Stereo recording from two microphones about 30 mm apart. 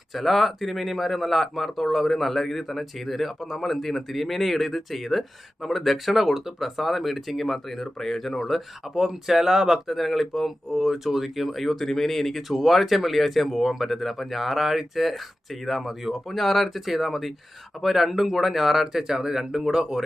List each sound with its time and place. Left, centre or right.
0.1 s speech: centre
7.9 s speech: centre
8.4 s speech: centre
9.0 s speech: centre
9.8 s speech: centre
10.7 s speech: centre
16.4 s speech: centre